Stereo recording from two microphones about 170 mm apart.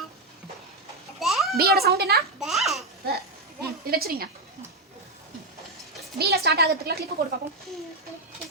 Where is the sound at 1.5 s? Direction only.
65° right (ahead or behind).